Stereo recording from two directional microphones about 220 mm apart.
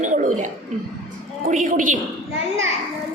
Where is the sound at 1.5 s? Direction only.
35° right (ahead or behind).